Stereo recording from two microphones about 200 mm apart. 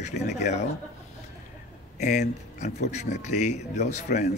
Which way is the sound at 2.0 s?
35° left (ahead or behind).